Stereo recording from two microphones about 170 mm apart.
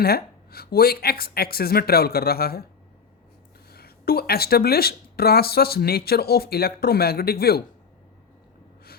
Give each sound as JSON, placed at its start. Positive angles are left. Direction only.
{"t": 0.0, "sound": "speech", "side_deg": 65}
{"t": 3.7, "sound": "speech", "side_deg": 65}